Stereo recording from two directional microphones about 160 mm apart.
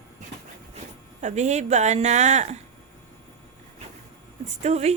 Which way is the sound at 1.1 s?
45° right (ahead or behind).